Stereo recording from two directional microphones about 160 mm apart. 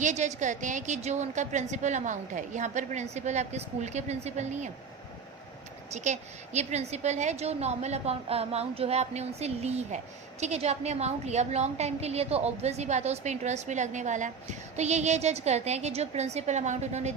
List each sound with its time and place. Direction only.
0.0 s a woman's voice: 50° right (ahead or behind)
5.9 s a woman's voice: 45° right (ahead or behind)